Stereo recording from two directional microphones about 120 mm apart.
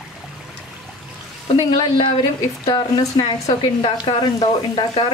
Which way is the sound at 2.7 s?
35° left (ahead or behind).